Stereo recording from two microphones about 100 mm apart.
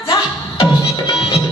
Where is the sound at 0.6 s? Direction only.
60° left (ahead or behind).